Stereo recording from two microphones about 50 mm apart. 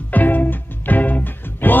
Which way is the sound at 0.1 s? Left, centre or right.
Left.